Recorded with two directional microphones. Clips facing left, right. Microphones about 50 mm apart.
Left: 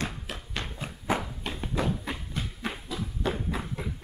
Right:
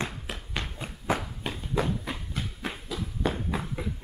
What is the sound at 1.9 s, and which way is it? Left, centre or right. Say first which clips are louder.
Clip-clop: even; centre.